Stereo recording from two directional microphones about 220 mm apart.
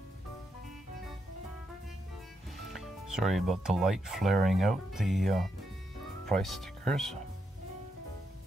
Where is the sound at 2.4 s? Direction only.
Centre (ahead or behind).